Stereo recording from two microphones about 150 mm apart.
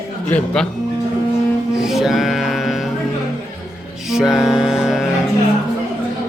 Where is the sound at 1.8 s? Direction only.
5° right (ahead or behind).